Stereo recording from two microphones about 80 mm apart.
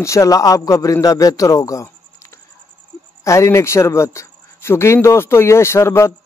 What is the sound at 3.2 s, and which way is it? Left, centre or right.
Speech, left.